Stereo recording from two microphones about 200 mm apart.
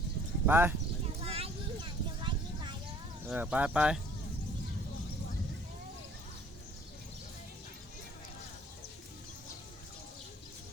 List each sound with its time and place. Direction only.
0.4 s speech: 10° right (ahead or behind)
1.2 s a sound: 30° right (ahead or behind)
3.2 s speech: 5° right (ahead or behind)